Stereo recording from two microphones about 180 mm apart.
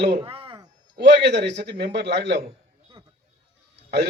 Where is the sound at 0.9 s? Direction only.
70° right (ahead or behind).